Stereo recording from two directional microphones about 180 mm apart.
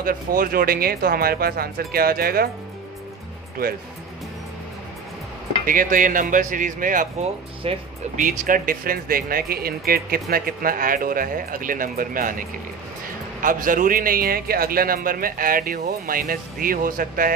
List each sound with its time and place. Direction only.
0.0 s speech: 50° right (ahead or behind)
5.7 s a man's voice: 50° right (ahead or behind)
7.6 s speech: 35° right (ahead or behind)
8.2 s a man's voice: 50° right (ahead or behind)